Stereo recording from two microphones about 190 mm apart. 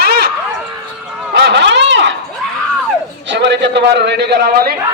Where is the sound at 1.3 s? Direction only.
65° right (ahead or behind).